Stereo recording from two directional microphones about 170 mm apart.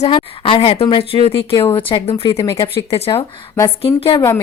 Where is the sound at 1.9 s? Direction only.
30° left (ahead or behind).